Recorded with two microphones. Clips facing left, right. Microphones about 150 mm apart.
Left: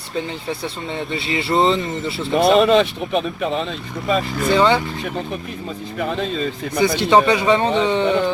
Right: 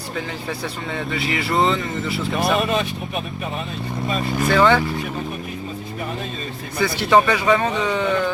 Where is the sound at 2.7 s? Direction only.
70° left (ahead or behind).